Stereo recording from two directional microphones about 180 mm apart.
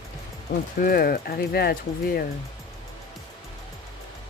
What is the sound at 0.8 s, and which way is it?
Speech, 55° left (ahead or behind).